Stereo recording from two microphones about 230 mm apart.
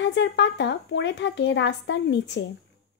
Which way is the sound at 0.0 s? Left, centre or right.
Left.